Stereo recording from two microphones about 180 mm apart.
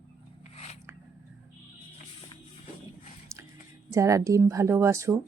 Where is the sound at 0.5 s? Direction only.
35° left (ahead or behind).